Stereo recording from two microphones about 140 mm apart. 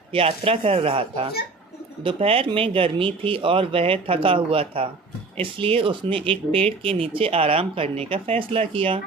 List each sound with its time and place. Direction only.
0.1 s speech: 45° right (ahead or behind)